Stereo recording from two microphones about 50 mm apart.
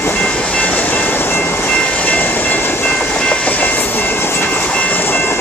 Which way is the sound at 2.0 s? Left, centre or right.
Left.